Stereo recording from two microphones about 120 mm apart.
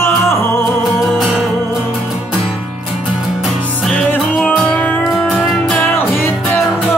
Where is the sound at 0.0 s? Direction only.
20° left (ahead or behind).